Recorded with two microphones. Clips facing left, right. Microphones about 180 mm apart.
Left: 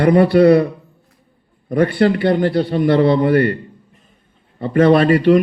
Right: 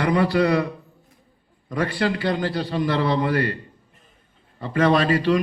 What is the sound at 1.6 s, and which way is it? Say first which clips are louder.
A man's voice: left 9 dB; 55° left (ahead or behind).